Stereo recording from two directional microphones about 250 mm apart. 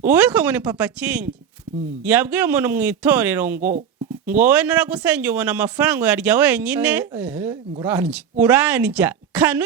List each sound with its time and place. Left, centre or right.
0.0 s a man's voice: centre